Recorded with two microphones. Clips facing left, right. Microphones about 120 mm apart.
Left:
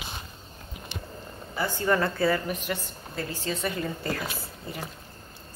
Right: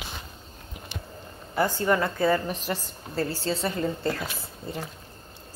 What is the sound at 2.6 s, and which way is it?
A woman's voice, 35° right (ahead or behind).